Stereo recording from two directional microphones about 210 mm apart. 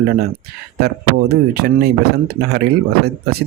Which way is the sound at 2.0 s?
50° right (ahead or behind).